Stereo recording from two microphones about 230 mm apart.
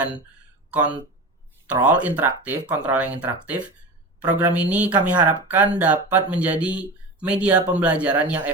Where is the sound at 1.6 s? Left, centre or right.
Centre.